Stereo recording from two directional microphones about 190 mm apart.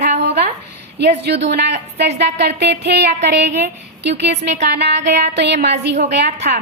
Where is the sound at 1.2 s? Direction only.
65° right (ahead or behind).